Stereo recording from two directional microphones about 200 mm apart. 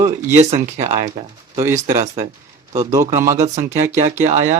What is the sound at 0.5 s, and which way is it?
Speech, 35° right (ahead or behind).